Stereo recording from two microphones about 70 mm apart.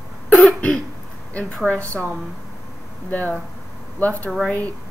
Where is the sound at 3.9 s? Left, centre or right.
Left.